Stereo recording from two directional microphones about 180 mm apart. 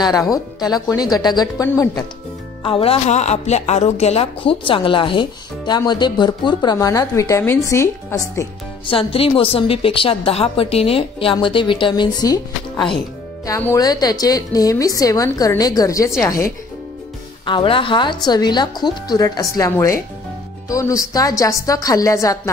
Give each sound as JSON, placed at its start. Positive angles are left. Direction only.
{"t": 0.1, "sound": "speech", "side_deg": 0}
{"t": 0.6, "sound": "speech", "side_deg": 20}
{"t": 2.6, "sound": "speech", "side_deg": 30}
{"t": 8.8, "sound": "a woman's voice", "side_deg": 30}
{"t": 17.5, "sound": "speech", "side_deg": 30}